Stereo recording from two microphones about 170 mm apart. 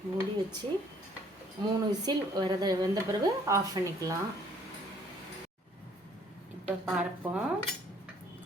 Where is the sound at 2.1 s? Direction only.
25° right (ahead or behind).